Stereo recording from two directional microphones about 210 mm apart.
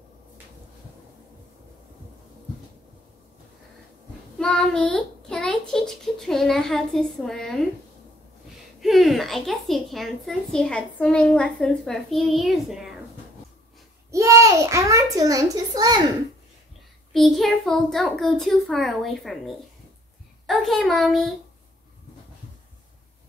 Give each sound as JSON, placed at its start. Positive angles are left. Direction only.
{"t": 4.4, "sound": "a woman's voice", "side_deg": 5}
{"t": 8.8, "sound": "a woman's voice", "side_deg": 0}
{"t": 14.1, "sound": "a child's voice", "side_deg": -15}
{"t": 17.1, "sound": "a woman's voice", "side_deg": 0}